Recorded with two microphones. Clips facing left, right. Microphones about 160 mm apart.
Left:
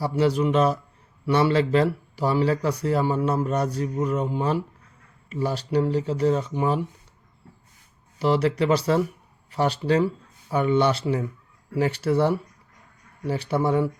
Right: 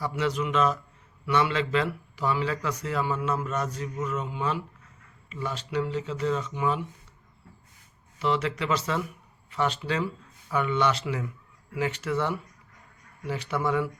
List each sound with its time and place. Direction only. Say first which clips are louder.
0.0 s speech: left 7 dB; 35° left (ahead or behind)
8.2 s speech: left 6 dB; 40° left (ahead or behind)